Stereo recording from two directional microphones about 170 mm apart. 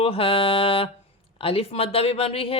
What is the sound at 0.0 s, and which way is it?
Speech, 35° left (ahead or behind).